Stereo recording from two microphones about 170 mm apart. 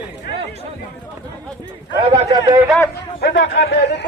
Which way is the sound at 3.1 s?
90° left.